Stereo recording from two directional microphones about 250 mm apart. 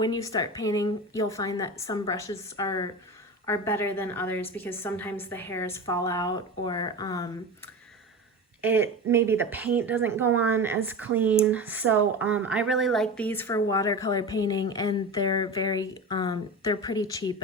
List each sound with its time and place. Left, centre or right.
0.0 s speech: centre
8.6 s speech: centre